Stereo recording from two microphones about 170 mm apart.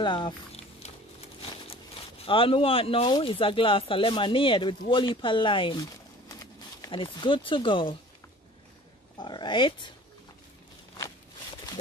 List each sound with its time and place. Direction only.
0.0 s a sound: 30° left (ahead or behind)
2.2 s speech: 30° left (ahead or behind)
9.2 s speech: 25° left (ahead or behind)